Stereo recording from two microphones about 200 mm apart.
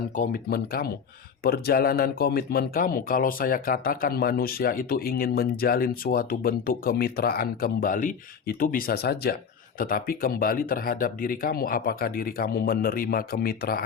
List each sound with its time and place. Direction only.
0.2 s speech: 50° left (ahead or behind)